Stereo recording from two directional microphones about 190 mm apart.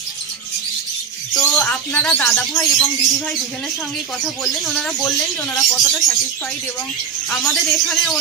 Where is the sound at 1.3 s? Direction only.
5° left (ahead or behind).